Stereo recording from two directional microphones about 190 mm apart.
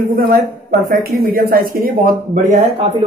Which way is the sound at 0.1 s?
50° right (ahead or behind).